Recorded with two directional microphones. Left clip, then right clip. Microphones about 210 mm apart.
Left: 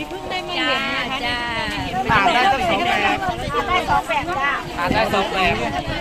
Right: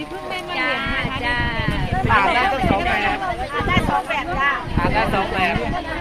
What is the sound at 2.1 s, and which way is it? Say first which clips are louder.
Speech: even; 20° left (ahead or behind).